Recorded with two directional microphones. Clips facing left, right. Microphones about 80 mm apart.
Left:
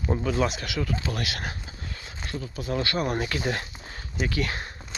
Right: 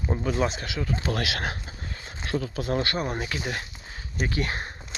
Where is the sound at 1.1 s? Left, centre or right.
Right.